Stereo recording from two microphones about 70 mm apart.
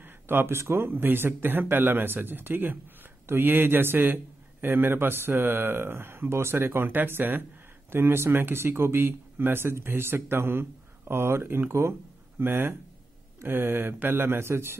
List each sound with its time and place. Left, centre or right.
0.0 s speech: right